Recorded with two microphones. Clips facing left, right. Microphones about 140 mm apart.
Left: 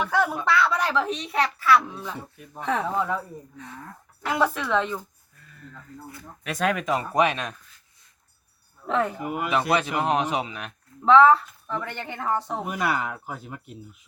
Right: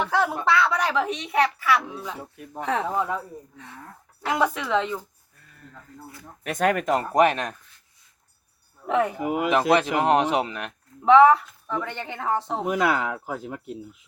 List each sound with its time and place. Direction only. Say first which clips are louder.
0.0 s a woman's voice: right 1 dB; 25° right (ahead or behind)
2.8 s a woman's voice: even; 15° right (ahead or behind)
4.3 s speech: even; 20° right (ahead or behind)
6.4 s speech: right 3 dB; 50° right (ahead or behind)
8.9 s a woman's voice: right 2 dB; 15° right (ahead or behind)
9.2 s speech: right 4 dB; 90° right; by 10.7 s 65° right (ahead or behind)
11.0 s a woman's voice: right 1 dB; 15° right (ahead or behind)
12.6 s speech: right 4 dB; 90° right